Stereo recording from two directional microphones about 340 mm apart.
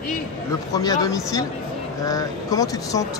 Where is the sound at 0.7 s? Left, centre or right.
Centre.